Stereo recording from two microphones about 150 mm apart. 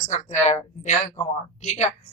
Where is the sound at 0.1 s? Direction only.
50° left (ahead or behind).